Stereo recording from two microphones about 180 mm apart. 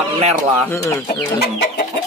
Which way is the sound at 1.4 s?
65° left (ahead or behind).